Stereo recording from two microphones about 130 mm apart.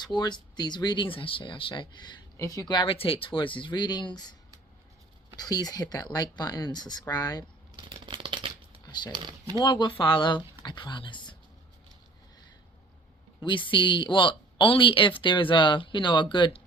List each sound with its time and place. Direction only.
0.0 s speech: 35° left (ahead or behind)
5.4 s speech: 30° left (ahead or behind)
7.8 s shuffling cards: 40° right (ahead or behind)
8.8 s a sound: 35° left (ahead or behind)
9.1 s speech: 35° right (ahead or behind)
9.6 s speech: 35° left (ahead or behind)
13.4 s speech: 40° left (ahead or behind)